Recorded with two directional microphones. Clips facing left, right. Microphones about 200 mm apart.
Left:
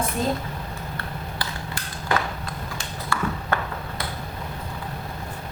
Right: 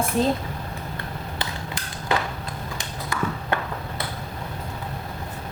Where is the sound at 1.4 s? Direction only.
20° right (ahead or behind).